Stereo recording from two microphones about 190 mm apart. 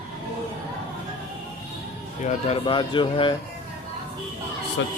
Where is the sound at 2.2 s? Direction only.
30° left (ahead or behind).